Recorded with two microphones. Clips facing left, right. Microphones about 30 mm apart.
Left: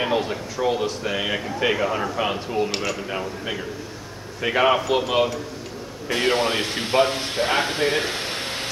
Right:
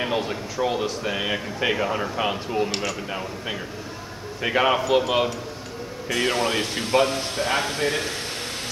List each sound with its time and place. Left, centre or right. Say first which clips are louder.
0.0 s speech: left 2 dB; centre
6.0 s speech: left 2 dB; left